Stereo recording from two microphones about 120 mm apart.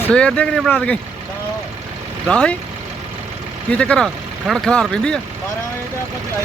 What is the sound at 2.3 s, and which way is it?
Speech, 5° left (ahead or behind).